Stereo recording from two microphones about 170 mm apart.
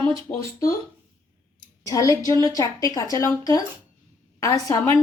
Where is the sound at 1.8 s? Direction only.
20° left (ahead or behind).